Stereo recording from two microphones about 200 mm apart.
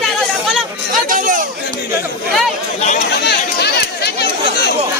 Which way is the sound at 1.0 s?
45° right (ahead or behind).